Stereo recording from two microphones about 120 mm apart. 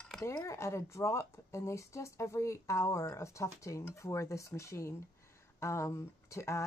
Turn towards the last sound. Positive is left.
turn(degrees=25)  # may be behind; listen again after turning